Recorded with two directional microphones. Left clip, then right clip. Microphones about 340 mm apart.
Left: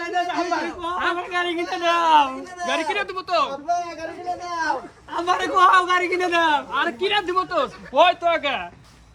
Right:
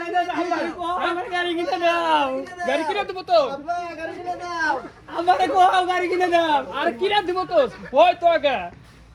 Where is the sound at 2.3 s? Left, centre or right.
Left.